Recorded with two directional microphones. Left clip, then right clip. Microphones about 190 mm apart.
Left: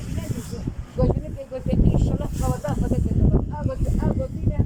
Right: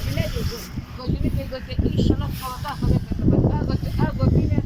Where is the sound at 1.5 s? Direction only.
60° left (ahead or behind).